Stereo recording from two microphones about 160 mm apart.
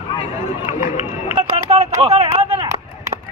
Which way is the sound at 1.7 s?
40° right (ahead or behind).